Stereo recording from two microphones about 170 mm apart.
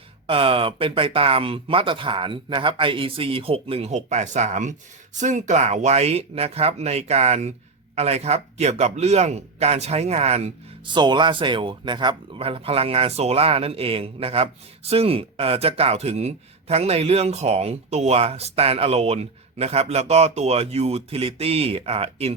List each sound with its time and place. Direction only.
0.3 s a man's voice: 30° right (ahead or behind)
10.9 s a man's voice: 25° right (ahead or behind)